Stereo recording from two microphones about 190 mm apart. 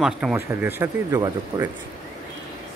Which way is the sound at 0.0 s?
5° right (ahead or behind).